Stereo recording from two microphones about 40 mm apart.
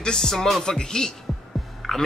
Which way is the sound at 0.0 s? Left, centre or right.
Centre.